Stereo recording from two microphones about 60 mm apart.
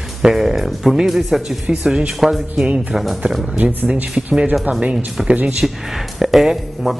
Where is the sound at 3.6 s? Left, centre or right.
Right.